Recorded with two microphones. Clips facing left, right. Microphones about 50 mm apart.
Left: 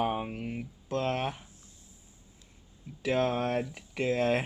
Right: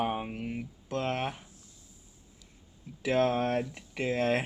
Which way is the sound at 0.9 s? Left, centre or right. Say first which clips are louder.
Left 1 dB; centre.